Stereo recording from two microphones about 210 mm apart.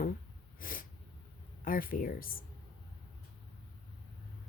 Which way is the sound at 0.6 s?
40° left (ahead or behind).